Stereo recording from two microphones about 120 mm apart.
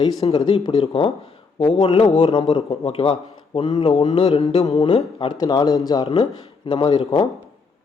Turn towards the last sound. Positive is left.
turn(degrees=35)  # may be behind; listen again after turning